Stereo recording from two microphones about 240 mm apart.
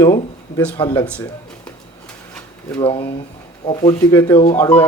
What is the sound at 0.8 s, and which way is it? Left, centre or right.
Speech, centre.